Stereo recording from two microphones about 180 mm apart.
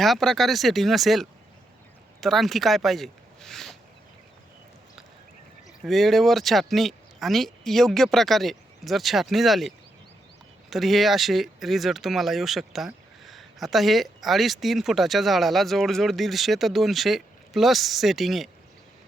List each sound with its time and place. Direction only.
0.0 s speech: centre (ahead or behind)
5.8 s speech: centre (ahead or behind)